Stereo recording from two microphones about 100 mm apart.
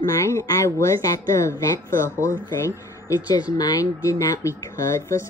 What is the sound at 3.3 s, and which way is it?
A woman's voice, 45° left (ahead or behind).